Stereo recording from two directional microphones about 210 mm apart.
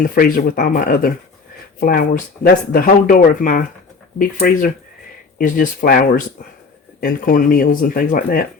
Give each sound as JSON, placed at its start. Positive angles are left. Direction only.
{"t": 0.0, "sound": "speech", "side_deg": 40}